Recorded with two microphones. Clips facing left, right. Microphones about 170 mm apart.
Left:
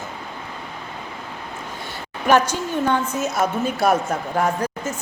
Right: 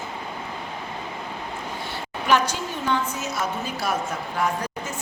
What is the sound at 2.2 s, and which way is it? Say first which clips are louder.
A woman's voice: left 4 dB; 50° left (ahead or behind).